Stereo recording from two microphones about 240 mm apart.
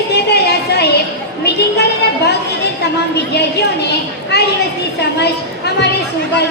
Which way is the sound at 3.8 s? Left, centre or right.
Left.